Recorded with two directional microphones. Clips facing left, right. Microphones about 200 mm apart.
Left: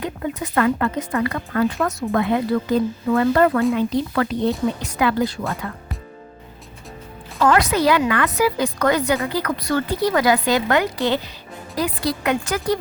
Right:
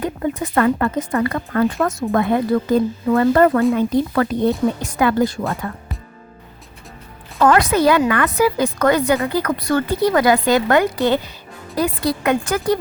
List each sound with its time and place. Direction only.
0.0 s a woman's voice: 45° right (ahead or behind)
1.8 s a woman's voice: 50° right (ahead or behind)
7.3 s a woman's voice: 55° right (ahead or behind)